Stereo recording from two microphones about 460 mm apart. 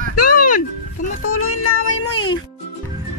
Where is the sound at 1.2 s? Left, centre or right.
Left.